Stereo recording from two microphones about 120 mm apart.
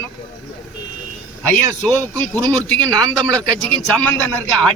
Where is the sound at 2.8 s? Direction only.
35° right (ahead or behind).